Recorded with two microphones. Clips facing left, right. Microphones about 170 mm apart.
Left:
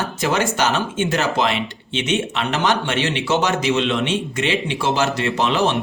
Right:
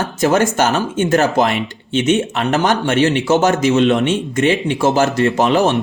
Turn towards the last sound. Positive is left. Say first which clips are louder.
# right 5 dB
turn(degrees=-45)  # may be behind; listen again after turning